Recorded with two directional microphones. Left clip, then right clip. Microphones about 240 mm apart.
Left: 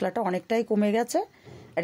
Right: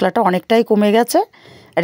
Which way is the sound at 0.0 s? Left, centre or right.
Right.